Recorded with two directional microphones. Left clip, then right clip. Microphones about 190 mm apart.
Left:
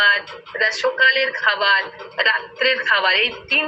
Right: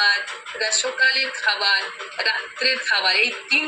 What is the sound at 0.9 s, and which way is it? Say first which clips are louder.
Speech: left 3 dB; 45° right (ahead or behind).